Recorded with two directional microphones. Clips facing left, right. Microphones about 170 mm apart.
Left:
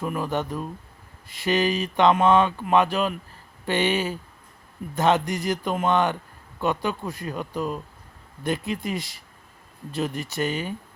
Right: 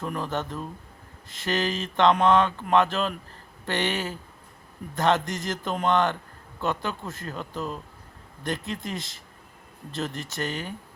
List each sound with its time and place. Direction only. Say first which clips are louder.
0.0 s speech: left 3 dB; 10° left (ahead or behind)